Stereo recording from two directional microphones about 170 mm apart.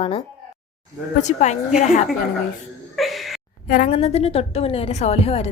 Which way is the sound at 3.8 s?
40° left (ahead or behind).